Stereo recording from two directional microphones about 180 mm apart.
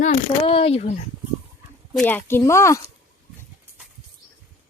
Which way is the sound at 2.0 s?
10° left (ahead or behind).